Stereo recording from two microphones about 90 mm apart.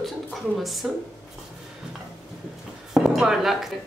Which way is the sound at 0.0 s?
Centre (ahead or behind).